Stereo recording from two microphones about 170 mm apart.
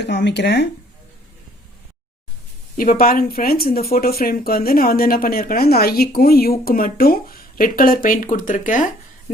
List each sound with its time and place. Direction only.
0.0 s speech: 90° left
2.7 s speech: 55° left (ahead or behind)